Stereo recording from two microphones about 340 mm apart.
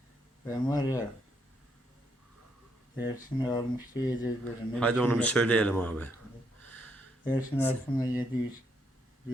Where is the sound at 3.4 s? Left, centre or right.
Centre.